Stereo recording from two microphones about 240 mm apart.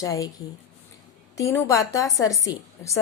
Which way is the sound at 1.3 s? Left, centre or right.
Centre.